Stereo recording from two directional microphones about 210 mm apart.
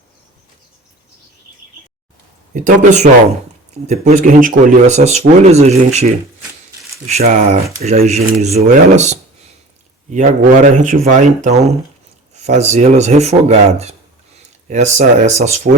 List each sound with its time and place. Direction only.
2.5 s speech: 35° right (ahead or behind)
7.1 s speech: 30° right (ahead or behind)
12.3 s speech: 30° right (ahead or behind)